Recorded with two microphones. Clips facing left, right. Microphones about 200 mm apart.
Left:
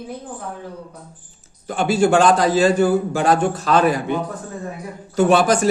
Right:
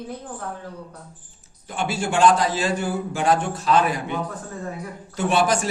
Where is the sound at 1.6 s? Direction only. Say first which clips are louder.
Left 9 dB; 40° left (ahead or behind).